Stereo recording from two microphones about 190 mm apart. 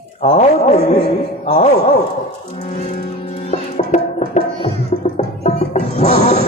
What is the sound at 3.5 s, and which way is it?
Music, 40° left (ahead or behind).